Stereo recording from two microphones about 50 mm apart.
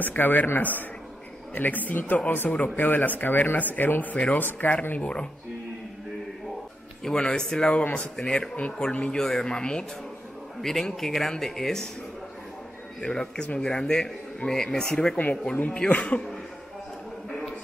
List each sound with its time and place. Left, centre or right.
0.0 s speech: left
4.9 s speech: left
7.0 s a man's voice: centre
7.6 s speech: left
8.2 s a man's voice: centre
13.0 s a man's voice: centre